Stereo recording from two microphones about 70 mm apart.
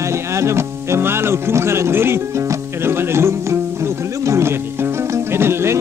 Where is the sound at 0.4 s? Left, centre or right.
Right.